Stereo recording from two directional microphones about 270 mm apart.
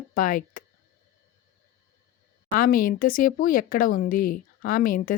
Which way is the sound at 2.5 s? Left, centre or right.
Left.